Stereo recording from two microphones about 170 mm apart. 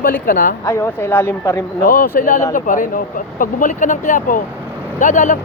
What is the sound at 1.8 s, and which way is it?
Speech, 55° left (ahead or behind).